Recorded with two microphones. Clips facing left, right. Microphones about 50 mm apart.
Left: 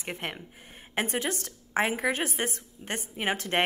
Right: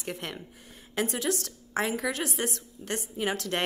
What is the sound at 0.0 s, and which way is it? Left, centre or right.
A woman's voice, left.